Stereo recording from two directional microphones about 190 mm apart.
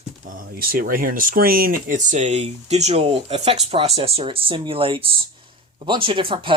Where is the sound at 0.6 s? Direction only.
50° right (ahead or behind).